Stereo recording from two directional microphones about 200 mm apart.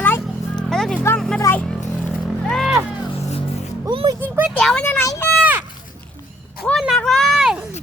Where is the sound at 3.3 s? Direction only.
35° left (ahead or behind).